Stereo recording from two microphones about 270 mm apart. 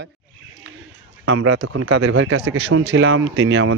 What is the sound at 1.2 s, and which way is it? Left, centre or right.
Speech, right.